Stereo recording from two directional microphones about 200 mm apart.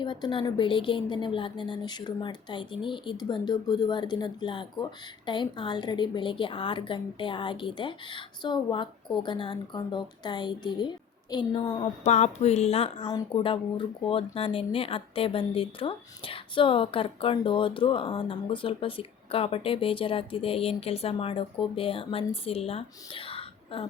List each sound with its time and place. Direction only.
0.0 s a woman's voice: 25° left (ahead or behind)